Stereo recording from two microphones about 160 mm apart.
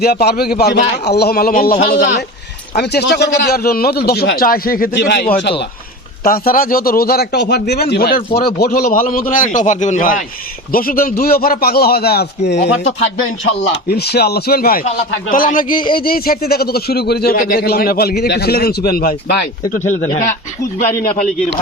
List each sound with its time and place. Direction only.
0.0 s speech: 75° left (ahead or behind)
2.7 s a man's voice: 90° left
6.2 s a man's voice: 65° left (ahead or behind); by 12.5 s 85° left
13.8 s speech: 90° left; by 14.8 s 70° left (ahead or behind)
14.8 s a man's voice: 55° left (ahead or behind); by 18.1 s 70° left (ahead or behind)
18.2 s speech: 85° left